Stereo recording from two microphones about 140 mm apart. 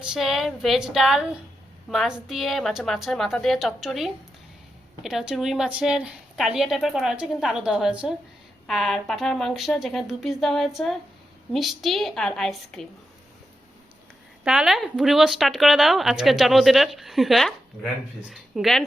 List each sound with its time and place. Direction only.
0.0 s speech: 5° right (ahead or behind)
14.4 s speech: 5° right (ahead or behind)